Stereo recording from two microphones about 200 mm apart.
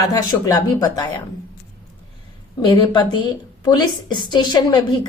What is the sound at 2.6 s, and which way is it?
Speech, 25° left (ahead or behind).